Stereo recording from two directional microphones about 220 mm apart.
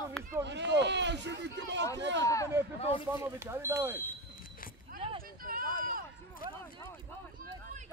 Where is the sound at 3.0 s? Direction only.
10° right (ahead or behind).